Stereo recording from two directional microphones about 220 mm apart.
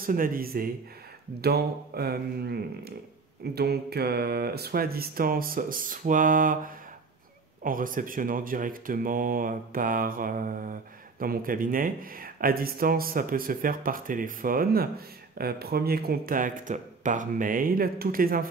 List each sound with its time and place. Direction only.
0.0 s speech: 40° right (ahead or behind)